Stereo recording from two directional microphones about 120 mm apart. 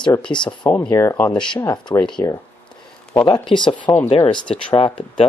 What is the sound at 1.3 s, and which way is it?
Speech, 5° left (ahead or behind).